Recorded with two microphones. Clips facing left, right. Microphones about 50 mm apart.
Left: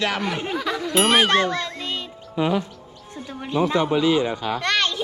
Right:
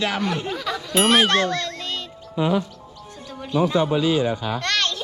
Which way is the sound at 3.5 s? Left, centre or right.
Left.